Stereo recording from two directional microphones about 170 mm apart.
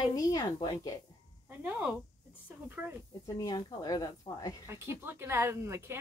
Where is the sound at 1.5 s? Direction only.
10° right (ahead or behind).